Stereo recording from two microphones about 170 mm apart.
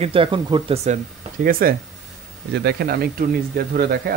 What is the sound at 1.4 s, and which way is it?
Speech, 60° right (ahead or behind).